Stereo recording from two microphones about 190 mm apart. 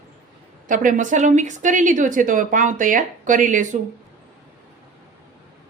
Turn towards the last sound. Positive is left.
turn(degrees=-40)  # may be behind; listen again after turning